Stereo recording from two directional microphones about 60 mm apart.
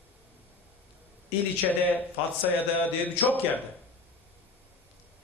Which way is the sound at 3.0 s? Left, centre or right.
Left.